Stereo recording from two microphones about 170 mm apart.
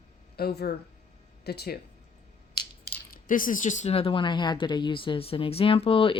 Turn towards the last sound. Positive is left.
turn(degrees=35)  # may be behind; listen again after turning